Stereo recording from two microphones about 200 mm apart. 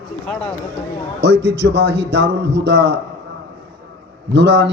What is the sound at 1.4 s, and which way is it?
A man's voice, 60° right (ahead or behind).